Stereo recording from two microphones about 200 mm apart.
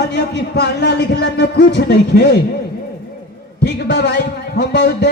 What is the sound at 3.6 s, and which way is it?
A man's voice, 55° left (ahead or behind).